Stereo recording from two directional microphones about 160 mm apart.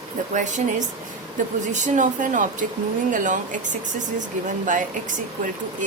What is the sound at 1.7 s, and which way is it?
Speech, 50° right (ahead or behind).